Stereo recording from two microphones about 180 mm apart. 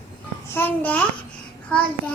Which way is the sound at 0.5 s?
10° left (ahead or behind).